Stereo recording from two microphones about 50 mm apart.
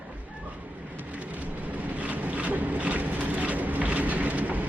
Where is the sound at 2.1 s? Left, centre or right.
Right.